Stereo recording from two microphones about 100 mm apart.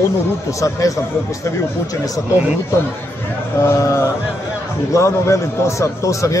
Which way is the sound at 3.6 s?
30° left (ahead or behind).